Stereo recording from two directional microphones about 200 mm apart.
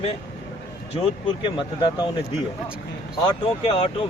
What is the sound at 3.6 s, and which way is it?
Speech, 30° left (ahead or behind).